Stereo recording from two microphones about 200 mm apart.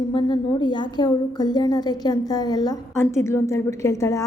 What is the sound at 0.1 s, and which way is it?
A woman's voice, 20° left (ahead or behind).